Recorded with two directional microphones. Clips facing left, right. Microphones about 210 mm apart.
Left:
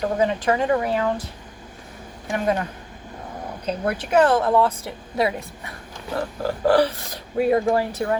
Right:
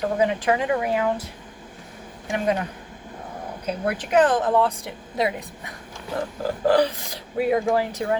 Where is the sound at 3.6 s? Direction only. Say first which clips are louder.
Left 1 dB; 10° right (ahead or behind).